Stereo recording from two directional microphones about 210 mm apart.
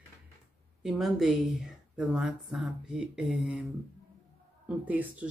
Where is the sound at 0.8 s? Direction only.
Centre (ahead or behind).